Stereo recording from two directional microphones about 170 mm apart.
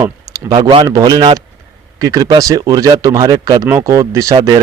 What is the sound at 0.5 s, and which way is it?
A man's voice, 30° right (ahead or behind).